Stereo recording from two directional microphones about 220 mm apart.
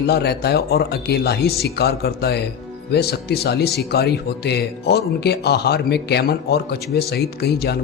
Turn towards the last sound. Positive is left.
turn(degrees=45)  # may be behind; listen again after turning